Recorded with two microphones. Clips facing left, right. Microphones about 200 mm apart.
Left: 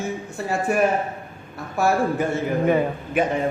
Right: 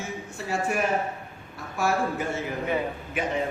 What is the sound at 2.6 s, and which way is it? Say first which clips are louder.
Speech: left 8 dB; 50° left (ahead or behind).